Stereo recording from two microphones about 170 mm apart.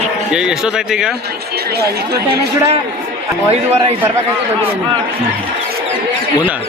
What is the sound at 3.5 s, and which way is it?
Speech, 40° right (ahead or behind).